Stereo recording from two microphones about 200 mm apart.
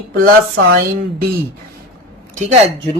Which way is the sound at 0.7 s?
50° right (ahead or behind).